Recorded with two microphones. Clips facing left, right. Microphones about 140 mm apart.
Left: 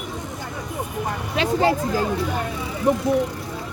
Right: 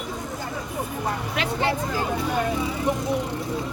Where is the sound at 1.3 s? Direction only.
35° left (ahead or behind).